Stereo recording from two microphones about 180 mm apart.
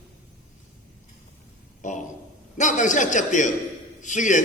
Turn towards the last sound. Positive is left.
turn(degrees=45)  # may be behind; listen again after turning